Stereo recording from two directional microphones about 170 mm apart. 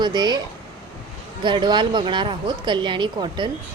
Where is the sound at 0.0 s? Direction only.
25° right (ahead or behind).